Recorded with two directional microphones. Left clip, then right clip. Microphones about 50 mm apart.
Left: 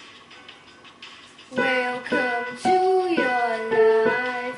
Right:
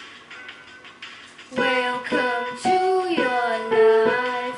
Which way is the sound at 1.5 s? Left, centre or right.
Left.